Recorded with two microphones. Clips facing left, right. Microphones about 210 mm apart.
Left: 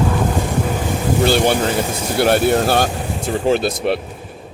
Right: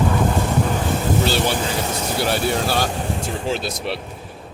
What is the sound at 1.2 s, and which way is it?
A man's voice, 55° left (ahead or behind).